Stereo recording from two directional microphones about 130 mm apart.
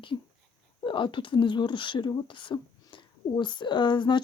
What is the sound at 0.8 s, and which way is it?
Speech, 40° left (ahead or behind).